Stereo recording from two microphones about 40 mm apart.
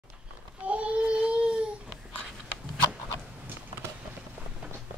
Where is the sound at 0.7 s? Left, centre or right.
Right.